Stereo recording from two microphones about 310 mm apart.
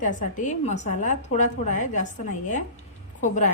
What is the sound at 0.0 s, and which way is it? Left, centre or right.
A woman's voice, left.